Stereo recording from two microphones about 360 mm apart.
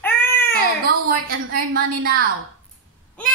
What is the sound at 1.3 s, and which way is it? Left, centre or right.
Speech, right.